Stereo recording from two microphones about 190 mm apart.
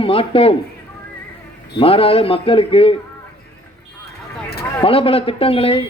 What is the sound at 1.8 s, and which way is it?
Speech, 30° left (ahead or behind).